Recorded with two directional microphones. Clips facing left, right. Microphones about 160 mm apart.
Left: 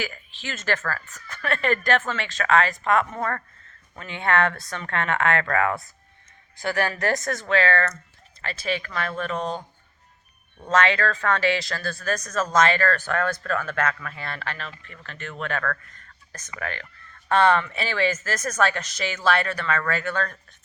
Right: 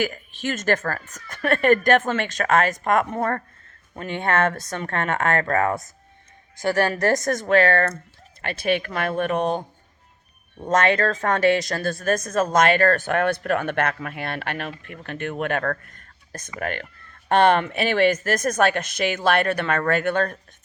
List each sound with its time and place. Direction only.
0.0 s speech: 50° right (ahead or behind)
10.7 s speech: 50° right (ahead or behind)
13.1 s speech: 20° right (ahead or behind)
14.2 s speech: 60° right (ahead or behind)
17.2 s speech: 60° right (ahead or behind)